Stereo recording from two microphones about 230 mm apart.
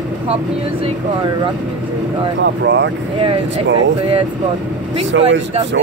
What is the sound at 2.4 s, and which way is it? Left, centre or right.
Speech, right.